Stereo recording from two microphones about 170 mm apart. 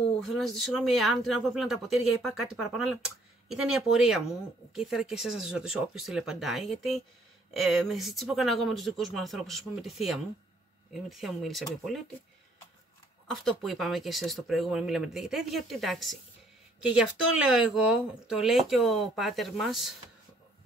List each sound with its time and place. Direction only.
0.2 s speech: centre (ahead or behind)
13.3 s speech: centre (ahead or behind)